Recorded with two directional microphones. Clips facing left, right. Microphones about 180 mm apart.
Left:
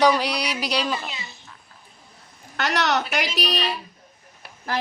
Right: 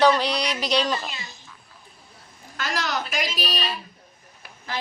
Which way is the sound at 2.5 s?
70° left (ahead or behind).